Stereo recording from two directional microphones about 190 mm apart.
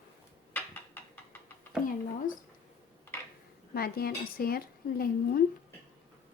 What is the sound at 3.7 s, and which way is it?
A woman's voice, 55° left (ahead or behind).